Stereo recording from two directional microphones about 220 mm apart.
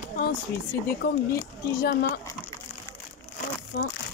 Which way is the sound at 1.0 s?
40° left (ahead or behind).